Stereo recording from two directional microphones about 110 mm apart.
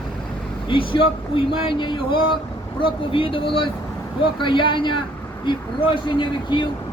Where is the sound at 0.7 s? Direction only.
50° left (ahead or behind).